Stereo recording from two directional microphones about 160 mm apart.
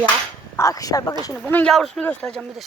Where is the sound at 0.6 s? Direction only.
20° left (ahead or behind).